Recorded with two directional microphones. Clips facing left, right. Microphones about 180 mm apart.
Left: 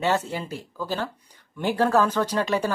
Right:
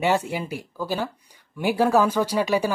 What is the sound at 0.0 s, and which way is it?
A woman's voice, 10° right (ahead or behind).